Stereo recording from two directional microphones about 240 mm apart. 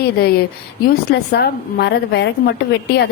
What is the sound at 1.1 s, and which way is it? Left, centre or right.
A woman's voice, left.